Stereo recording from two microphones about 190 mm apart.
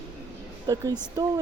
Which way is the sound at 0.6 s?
20° right (ahead or behind).